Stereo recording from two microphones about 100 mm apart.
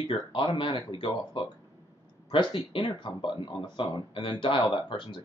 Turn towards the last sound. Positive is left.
turn(degrees=55)  # may be behind; listen again after turning